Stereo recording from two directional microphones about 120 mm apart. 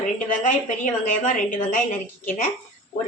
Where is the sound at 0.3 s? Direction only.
90° left.